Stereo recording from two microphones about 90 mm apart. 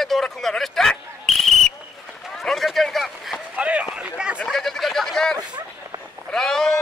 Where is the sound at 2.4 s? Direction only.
Centre (ahead or behind).